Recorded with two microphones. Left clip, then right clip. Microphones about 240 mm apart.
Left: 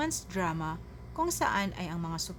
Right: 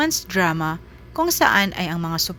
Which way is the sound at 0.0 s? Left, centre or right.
Right.